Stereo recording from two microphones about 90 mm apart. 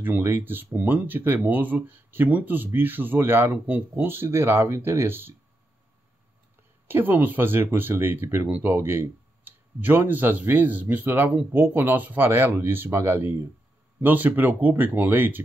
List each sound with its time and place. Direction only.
0.0 s speech: 25° right (ahead or behind)
6.9 s speech: 20° right (ahead or behind)